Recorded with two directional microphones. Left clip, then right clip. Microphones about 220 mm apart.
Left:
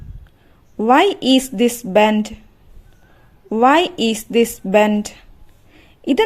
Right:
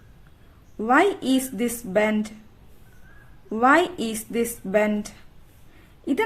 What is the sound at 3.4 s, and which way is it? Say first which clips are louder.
Speech: left 5 dB; 30° left (ahead or behind).